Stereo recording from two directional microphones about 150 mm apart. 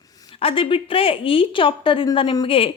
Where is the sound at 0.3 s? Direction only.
40° left (ahead or behind).